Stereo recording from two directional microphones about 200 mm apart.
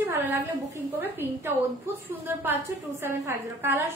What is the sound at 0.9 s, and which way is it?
A woman's voice, 10° right (ahead or behind).